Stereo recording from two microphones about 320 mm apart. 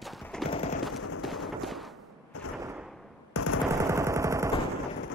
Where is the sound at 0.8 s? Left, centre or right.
Centre.